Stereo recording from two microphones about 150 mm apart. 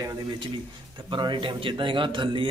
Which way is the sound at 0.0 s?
25° right (ahead or behind).